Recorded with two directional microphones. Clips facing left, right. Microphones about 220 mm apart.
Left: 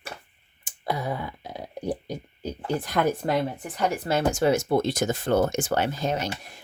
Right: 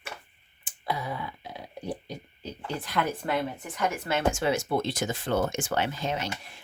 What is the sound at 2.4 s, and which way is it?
Speech, 45° left (ahead or behind).